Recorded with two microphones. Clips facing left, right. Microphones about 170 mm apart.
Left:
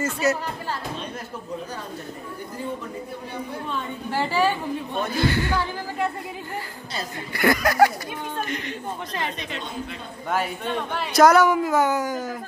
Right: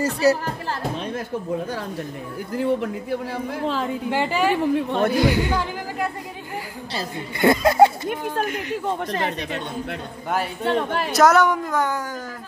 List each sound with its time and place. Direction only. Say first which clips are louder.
0.0 s speech: right 5 dB; 35° right (ahead or behind)
2.5 s a man's voice: right 10 dB; 85° right
4.2 s speech: left 1 dB; 15° right (ahead or behind)
4.5 s a woman's voice: right 6 dB; 90° right
5.1 s speech: right 3 dB; 15° right (ahead or behind)
8.5 s speech: right 3 dB; 5° right (ahead or behind)
10.6 s speech: right 6 dB; 75° right (ahead or behind)
11.1 s a woman's voice: left 1 dB; centre (ahead or behind)